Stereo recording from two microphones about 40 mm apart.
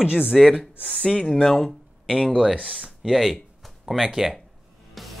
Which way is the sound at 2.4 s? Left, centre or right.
Centre.